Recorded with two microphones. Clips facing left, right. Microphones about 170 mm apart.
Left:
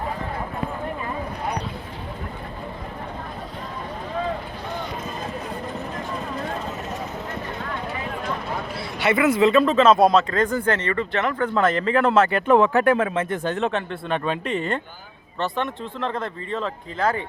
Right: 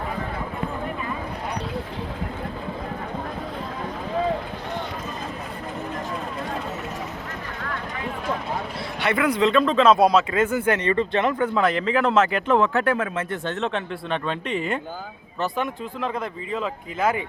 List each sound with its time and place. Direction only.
9.0 s speech: 5° left (ahead or behind); by 11.5 s 15° right (ahead or behind)
11.5 s speech: centre (ahead or behind)
12.5 s speech: 15° left (ahead or behind)
13.3 s speech: 15° left (ahead or behind); by 16.7 s 5° right (ahead or behind)
17.0 s speech: 20° right (ahead or behind)